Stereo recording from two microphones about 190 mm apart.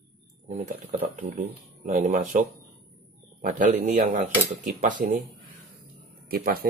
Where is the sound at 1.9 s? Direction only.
40° right (ahead or behind).